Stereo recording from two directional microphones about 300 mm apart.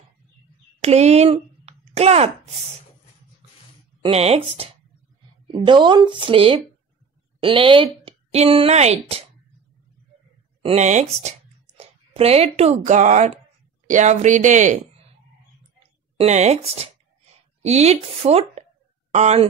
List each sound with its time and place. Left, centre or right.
0.7 s a sound: right
4.0 s a woman's voice: right
10.6 s a woman's voice: right
16.2 s a woman's voice: right